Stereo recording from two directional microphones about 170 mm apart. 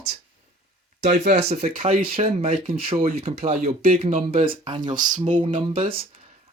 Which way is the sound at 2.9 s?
55° right (ahead or behind).